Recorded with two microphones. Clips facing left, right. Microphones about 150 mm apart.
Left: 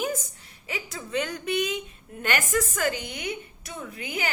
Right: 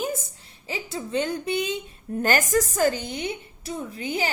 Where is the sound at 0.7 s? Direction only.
30° right (ahead or behind).